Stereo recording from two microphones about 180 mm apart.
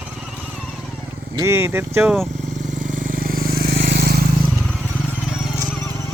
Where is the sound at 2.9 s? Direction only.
50° right (ahead or behind).